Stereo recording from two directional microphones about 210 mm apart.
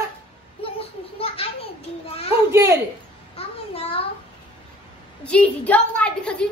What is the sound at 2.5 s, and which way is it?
Speech, 10° right (ahead or behind).